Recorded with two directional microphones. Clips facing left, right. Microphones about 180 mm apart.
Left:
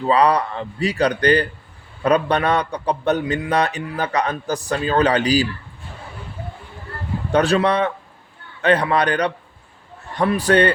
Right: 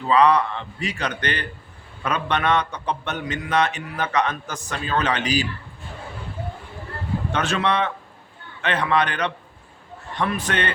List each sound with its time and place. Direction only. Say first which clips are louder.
0.1 s a man's voice: even; 35° left (ahead or behind)
7.3 s a man's voice: left 7 dB; 35° left (ahead or behind)